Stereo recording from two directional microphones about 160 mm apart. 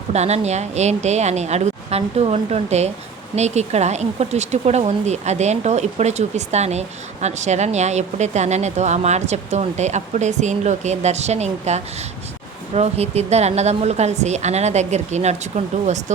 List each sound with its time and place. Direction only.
0.1 s speech: 45° right (ahead or behind)